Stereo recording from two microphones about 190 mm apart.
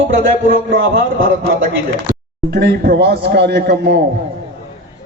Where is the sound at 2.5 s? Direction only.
55° right (ahead or behind).